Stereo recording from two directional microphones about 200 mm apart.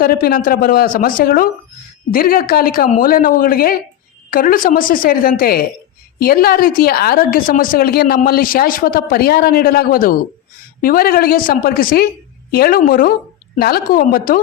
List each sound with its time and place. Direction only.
0.0 s a woman's voice: 45° left (ahead or behind)